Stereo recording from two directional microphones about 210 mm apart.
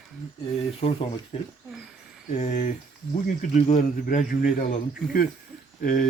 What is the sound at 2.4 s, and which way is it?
Speech, 35° left (ahead or behind).